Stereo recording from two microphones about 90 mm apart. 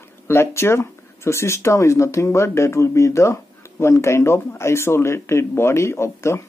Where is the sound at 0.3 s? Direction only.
30° left (ahead or behind).